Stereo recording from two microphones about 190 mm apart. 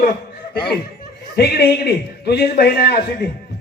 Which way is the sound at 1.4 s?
60° left (ahead or behind).